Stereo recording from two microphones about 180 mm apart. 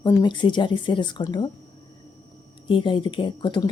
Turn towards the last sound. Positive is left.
turn(degrees=25)  # may be behind; listen again after turning